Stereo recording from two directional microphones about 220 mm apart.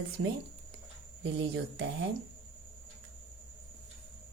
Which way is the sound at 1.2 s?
55° right (ahead or behind).